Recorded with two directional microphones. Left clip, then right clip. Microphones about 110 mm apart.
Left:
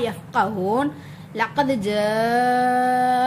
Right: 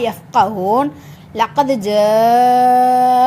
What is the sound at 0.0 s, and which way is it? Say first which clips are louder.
Speech: right 7 dB; 40° right (ahead or behind).